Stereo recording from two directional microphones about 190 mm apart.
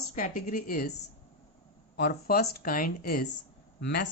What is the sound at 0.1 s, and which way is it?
Speech, 40° left (ahead or behind).